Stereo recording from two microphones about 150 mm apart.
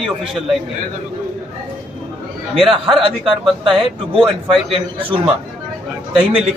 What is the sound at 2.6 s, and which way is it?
A man's voice, 35° right (ahead or behind).